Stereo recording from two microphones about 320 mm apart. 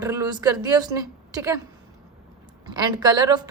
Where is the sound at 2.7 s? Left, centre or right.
Centre.